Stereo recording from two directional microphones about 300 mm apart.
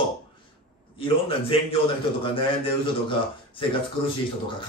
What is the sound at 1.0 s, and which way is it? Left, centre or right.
Mantra, centre.